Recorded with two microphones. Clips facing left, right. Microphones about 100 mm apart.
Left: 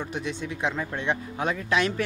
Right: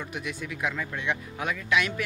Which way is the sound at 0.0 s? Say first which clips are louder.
Left 4 dB; 30° left (ahead or behind).